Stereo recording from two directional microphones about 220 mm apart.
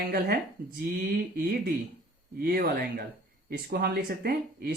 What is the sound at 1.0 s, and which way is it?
Speech, 40° right (ahead or behind).